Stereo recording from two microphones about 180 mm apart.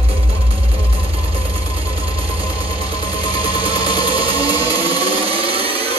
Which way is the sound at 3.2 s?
25° left (ahead or behind).